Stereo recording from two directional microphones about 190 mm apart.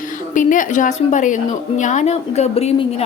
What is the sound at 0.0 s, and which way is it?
A woman's voice, 45° left (ahead or behind).